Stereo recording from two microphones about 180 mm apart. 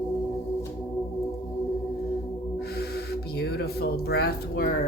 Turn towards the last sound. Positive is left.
turn(degrees=60)  # may be behind; listen again after turning